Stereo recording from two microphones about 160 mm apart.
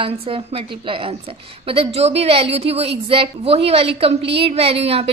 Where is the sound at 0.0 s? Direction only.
35° right (ahead or behind).